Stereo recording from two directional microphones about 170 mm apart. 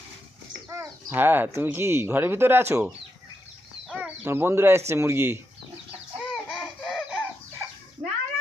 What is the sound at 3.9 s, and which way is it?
Speech, 10° right (ahead or behind).